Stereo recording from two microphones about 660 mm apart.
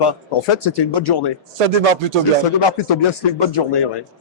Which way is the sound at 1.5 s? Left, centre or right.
Right.